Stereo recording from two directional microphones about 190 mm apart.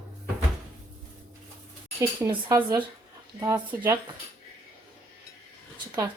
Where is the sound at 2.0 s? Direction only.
15° right (ahead or behind).